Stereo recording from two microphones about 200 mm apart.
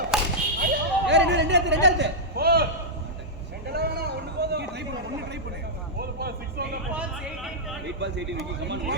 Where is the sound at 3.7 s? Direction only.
50° right (ahead or behind).